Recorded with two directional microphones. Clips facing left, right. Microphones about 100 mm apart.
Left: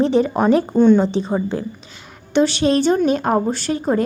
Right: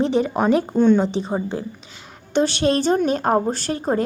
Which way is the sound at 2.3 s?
45° right (ahead or behind).